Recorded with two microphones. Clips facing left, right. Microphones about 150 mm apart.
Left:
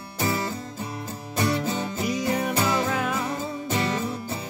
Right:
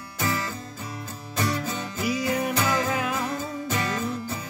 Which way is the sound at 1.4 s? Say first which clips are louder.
Left 3 dB; 25° left (ahead or behind).